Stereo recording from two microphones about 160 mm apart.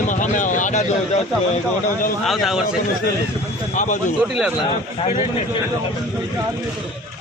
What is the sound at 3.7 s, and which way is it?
Speech, 55° left (ahead or behind).